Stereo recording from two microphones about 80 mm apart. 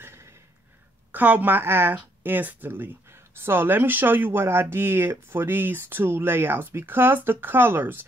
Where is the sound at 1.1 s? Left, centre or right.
Right.